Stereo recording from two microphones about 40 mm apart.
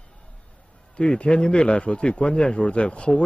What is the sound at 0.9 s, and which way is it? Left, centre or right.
Speech, left.